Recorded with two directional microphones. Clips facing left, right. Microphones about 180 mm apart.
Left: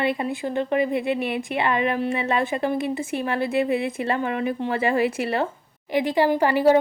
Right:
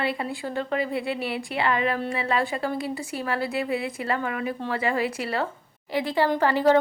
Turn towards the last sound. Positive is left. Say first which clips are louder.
# left 2 dB
turn(degrees=10)  # may be behind; listen again after turning